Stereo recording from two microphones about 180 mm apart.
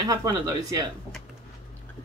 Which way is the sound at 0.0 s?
20° right (ahead or behind).